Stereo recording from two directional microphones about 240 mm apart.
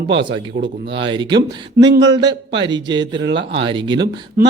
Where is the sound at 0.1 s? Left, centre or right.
Centre.